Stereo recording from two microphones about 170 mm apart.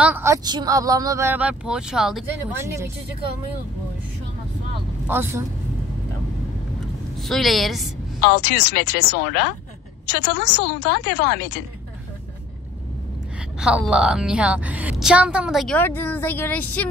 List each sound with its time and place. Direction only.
0.0 s speech: 10° right (ahead or behind)
5.0 s speech: 15° right (ahead or behind)
7.2 s a woman's voice: centre (ahead or behind)
8.2 s a woman's voice: 75° left (ahead or behind)
13.6 s a woman's voice: 5° right (ahead or behind)
15.8 s speech: 10° left (ahead or behind)